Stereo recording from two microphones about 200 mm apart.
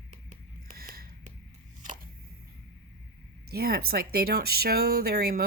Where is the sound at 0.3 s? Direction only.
45° right (ahead or behind).